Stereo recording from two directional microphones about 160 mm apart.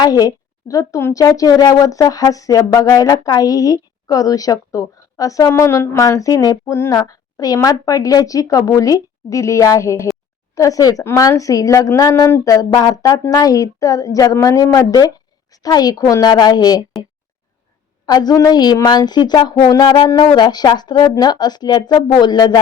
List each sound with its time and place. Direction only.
0.0 s speech: 25° left (ahead or behind)
18.0 s speech: 25° left (ahead or behind)